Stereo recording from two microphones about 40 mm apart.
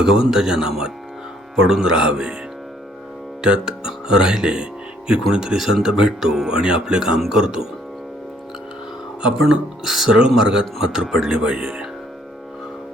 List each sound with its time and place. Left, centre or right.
0.0 s speech: centre
3.4 s speech: centre
5.5 s speech: centre
9.8 s speech: centre
10.1 s speech: centre